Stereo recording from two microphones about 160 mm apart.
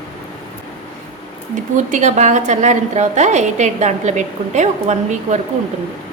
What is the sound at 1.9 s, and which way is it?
A woman's voice, 45° right (ahead or behind).